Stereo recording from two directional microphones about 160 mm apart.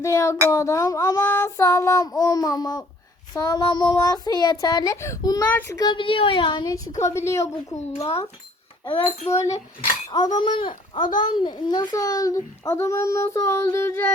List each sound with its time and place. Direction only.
0.0 s a child's voice: 20° left (ahead or behind)
5.7 s a child's voice: 30° left (ahead or behind)
7.0 s a woman's voice: 15° left (ahead or behind)
7.9 s a child's voice: 40° left (ahead or behind)
10.1 s a child's voice: 25° left (ahead or behind)